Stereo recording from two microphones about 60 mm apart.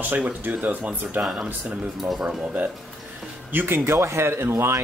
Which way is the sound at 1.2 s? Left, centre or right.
Centre.